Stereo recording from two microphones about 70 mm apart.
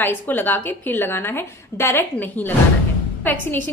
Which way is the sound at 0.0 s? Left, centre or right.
Left.